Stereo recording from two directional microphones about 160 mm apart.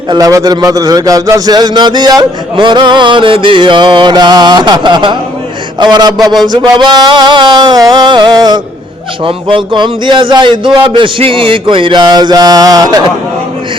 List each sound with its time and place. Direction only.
0.1 s a man's voice: 20° right (ahead or behind)